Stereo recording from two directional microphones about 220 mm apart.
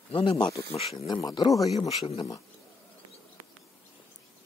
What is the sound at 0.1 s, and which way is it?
Speech, 25° left (ahead or behind).